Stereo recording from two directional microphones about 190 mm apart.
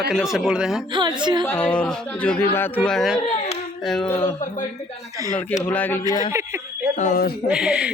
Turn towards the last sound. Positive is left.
turn(degrees=-5)  # may be behind; listen again after turning